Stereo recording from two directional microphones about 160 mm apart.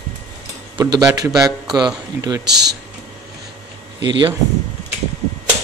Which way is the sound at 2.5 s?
90° right.